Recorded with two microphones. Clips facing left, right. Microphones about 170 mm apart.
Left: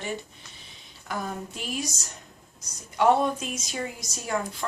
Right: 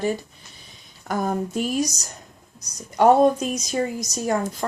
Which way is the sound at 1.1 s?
45° right (ahead or behind).